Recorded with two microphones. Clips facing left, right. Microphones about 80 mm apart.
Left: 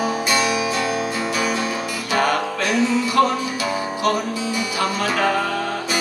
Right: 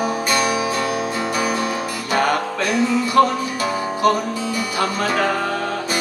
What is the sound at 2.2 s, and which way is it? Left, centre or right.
Music, right.